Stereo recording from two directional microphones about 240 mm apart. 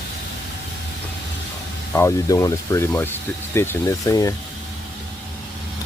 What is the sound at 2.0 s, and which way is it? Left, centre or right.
Speech, centre.